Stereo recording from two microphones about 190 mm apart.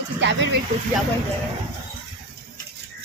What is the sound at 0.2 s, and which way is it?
Speech, 75° right (ahead or behind).